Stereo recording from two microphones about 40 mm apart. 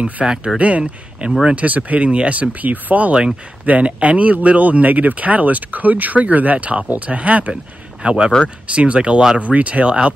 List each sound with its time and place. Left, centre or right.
0.2 s speech: centre
0.6 s speech: right
2.3 s speech: right
8.0 s speech: right